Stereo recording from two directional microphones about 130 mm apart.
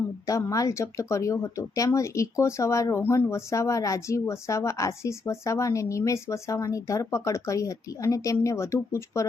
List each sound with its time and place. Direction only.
0.3 s speech: 25° left (ahead or behind)